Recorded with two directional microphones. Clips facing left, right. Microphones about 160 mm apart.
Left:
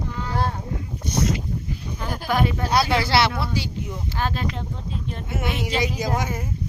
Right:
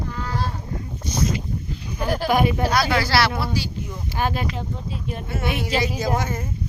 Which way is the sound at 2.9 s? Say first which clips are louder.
Even; 25° left (ahead or behind).